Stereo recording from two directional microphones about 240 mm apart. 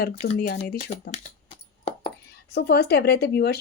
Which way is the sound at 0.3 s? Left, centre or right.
Left.